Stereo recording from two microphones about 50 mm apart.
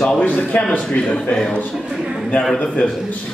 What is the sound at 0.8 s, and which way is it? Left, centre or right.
Speech, left.